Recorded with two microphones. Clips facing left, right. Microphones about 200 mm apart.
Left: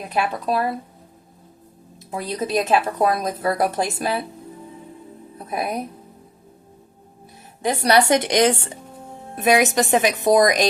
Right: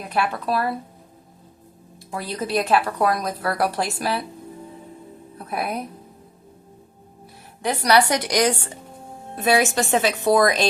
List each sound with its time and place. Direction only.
0.1 s a woman's voice: 20° left (ahead or behind)
2.0 s a woman's voice: 20° left (ahead or behind)
5.4 s a woman's voice: 20° left (ahead or behind)
7.6 s a woman's voice: 25° left (ahead or behind)